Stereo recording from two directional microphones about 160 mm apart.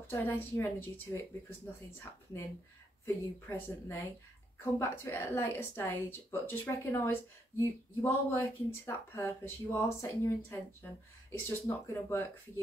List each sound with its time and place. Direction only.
0.1 s a woman's voice: 10° left (ahead or behind)
3.1 s a woman's voice: 15° left (ahead or behind)